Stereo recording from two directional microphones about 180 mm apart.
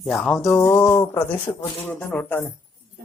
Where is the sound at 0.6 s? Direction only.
15° left (ahead or behind).